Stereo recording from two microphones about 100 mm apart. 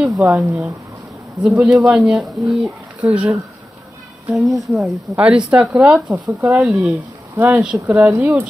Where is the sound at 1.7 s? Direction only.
5° right (ahead or behind).